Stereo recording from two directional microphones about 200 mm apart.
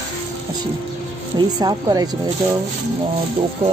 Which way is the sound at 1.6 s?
20° right (ahead or behind).